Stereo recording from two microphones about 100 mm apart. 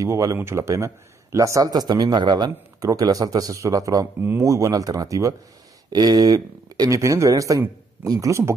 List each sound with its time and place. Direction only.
0.0 s a man's voice: 30° right (ahead or behind)
4.2 s a man's voice: 25° right (ahead or behind)